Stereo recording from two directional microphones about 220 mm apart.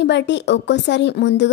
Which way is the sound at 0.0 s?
50° left (ahead or behind).